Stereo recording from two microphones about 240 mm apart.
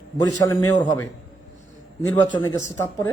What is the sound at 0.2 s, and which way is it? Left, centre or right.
Speech, centre.